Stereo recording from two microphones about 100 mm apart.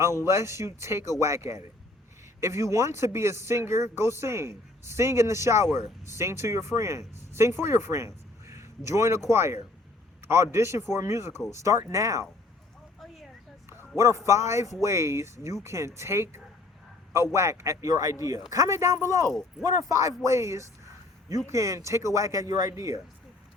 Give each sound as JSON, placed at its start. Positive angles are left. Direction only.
{"t": 0.3, "sound": "a man's voice", "side_deg": -30}
{"t": 13.7, "sound": "a sound", "side_deg": -25}
{"t": 14.3, "sound": "a man's voice", "side_deg": -30}